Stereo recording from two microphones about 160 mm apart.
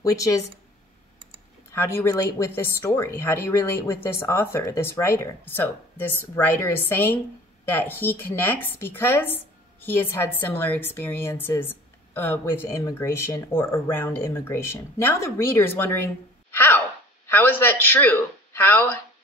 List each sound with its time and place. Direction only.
0.0 s speech: 20° left (ahead or behind)
1.7 s speech: 15° left (ahead or behind)
16.5 s a sound: 15° left (ahead or behind)
17.3 s a man's voice: 15° left (ahead or behind)